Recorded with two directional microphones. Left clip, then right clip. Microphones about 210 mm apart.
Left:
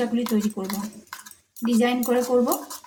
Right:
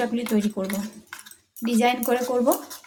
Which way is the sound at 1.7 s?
35° right (ahead or behind).